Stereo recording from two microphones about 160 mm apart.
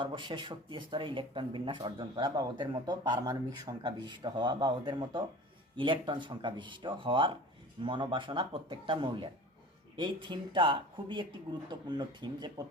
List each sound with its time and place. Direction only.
0.0 s speech: 30° right (ahead or behind)